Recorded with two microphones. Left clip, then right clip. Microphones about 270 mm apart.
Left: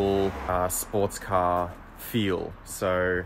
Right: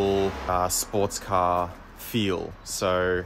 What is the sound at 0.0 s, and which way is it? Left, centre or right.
Speech, centre.